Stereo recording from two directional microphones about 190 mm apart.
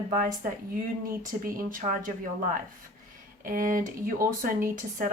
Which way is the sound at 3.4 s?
45° right (ahead or behind).